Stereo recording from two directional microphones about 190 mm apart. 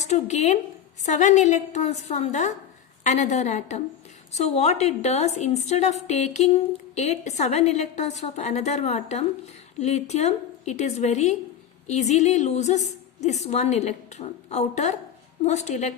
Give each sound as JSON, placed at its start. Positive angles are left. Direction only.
{"t": 0.0, "sound": "a woman's voice", "side_deg": 35}